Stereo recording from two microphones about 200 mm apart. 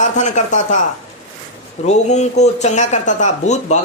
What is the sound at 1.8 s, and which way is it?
Speech, 35° left (ahead or behind).